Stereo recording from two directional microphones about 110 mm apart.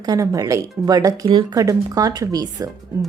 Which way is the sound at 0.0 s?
35° right (ahead or behind).